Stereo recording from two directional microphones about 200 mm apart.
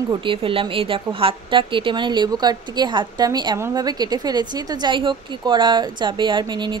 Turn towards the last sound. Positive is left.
turn(degrees=-25)  # may be behind; listen again after turning